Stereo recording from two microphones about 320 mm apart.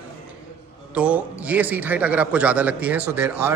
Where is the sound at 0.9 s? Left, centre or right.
Centre.